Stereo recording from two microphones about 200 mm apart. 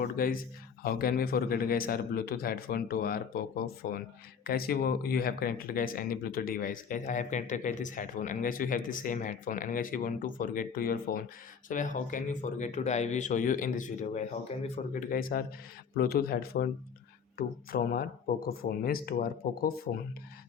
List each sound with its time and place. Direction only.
0.0 s speech: 45° left (ahead or behind)